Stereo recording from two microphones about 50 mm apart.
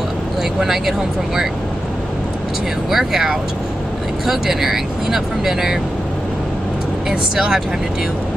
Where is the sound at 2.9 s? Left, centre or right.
Centre.